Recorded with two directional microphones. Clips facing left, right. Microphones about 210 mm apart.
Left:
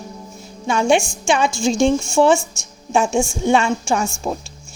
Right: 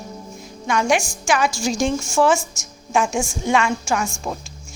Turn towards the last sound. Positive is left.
turn(degrees=30)  # may be behind; listen again after turning